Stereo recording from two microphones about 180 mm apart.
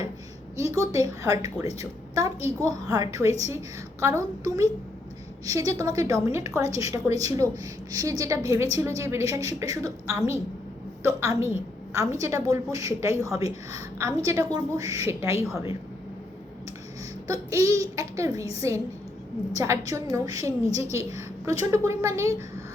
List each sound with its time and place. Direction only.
0.5 s a woman's voice: 15° right (ahead or behind)
17.2 s a woman's voice: 15° right (ahead or behind)